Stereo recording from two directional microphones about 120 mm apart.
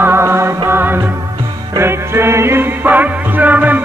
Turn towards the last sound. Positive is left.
turn(degrees=-15)  # may be behind; listen again after turning